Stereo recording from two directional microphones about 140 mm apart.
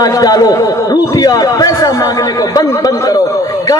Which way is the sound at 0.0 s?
25° left (ahead or behind).